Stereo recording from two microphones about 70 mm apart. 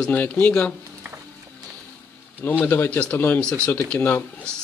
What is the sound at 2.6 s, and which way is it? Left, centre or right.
Speech, left.